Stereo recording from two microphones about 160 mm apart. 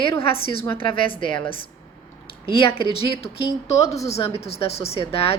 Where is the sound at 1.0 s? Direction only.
30° left (ahead or behind).